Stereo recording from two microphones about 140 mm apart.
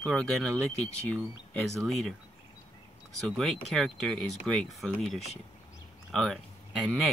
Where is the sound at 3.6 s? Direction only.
Centre (ahead or behind).